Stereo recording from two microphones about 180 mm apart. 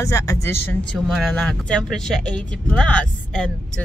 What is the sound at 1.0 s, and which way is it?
Speech, 5° left (ahead or behind).